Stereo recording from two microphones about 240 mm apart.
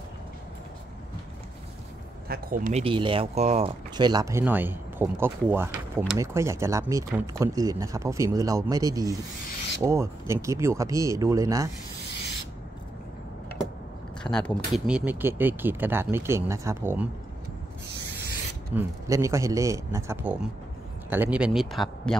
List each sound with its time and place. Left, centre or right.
2.2 s speech: right
2.8 s speech: right
14.2 s speech: centre
18.8 s speech: centre